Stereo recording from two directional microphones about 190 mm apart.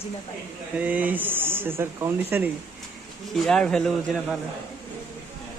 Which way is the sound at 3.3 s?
5° left (ahead or behind).